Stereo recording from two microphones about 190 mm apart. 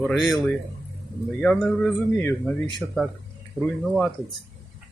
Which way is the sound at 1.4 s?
5° left (ahead or behind).